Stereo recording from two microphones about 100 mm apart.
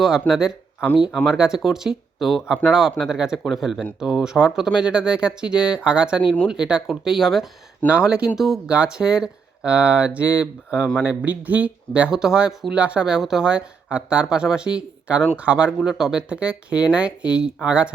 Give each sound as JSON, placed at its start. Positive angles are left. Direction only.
{"t": 0.0, "sound": "speech", "side_deg": -5}